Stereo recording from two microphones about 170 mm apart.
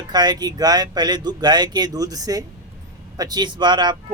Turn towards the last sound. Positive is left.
turn(degrees=-25)  # may be behind; listen again after turning